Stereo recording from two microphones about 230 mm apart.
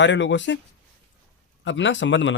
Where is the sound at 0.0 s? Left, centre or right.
Left.